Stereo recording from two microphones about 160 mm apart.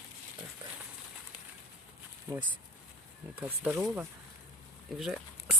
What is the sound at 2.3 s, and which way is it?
Speech, 15° right (ahead or behind).